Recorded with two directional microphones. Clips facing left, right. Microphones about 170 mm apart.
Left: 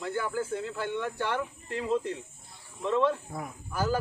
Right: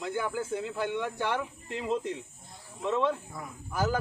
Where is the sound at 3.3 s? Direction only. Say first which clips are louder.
Left 4 dB; 50° left (ahead or behind).